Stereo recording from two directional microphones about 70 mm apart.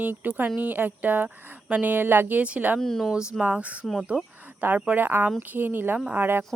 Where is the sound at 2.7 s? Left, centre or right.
Centre.